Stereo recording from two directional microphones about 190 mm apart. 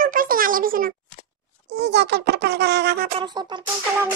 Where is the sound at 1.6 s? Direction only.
60° right (ahead or behind).